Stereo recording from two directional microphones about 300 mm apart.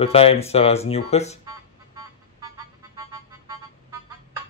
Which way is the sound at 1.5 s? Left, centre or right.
Centre.